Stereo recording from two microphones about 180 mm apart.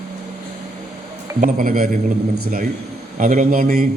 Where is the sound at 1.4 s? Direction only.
50° right (ahead or behind).